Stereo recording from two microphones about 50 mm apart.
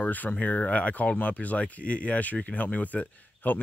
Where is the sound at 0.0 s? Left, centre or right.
Left.